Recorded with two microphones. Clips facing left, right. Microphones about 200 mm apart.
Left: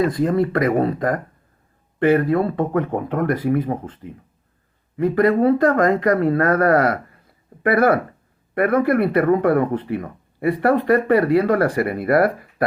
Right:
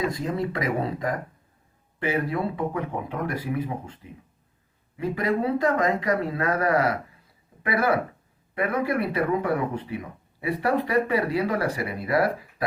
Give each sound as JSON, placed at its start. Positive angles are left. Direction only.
{"t": 0.1, "sound": "speech", "side_deg": 55}